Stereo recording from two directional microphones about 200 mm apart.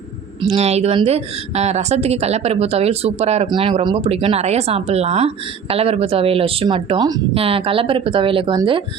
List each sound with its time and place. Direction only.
0.5 s a woman's voice: 30° right (ahead or behind)